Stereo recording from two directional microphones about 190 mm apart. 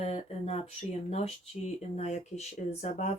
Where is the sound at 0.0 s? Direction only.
35° left (ahead or behind).